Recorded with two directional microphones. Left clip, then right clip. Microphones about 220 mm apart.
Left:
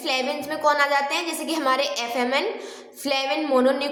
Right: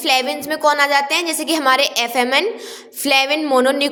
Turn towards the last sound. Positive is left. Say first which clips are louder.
# right 5 dB
turn(degrees=-35)  # may be behind; listen again after turning